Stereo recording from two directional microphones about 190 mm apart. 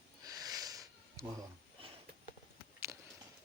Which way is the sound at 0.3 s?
20° right (ahead or behind).